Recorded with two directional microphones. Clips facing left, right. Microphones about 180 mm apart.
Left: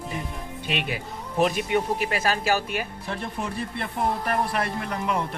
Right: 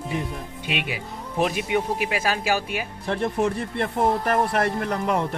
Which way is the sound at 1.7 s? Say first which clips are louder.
Even; 10° right (ahead or behind).